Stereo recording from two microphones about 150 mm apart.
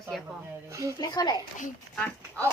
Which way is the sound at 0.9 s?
25° left (ahead or behind).